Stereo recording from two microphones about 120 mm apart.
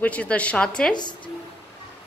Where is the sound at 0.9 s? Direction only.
40° left (ahead or behind).